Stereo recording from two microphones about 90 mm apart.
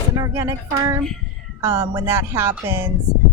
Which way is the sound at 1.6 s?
30° right (ahead or behind).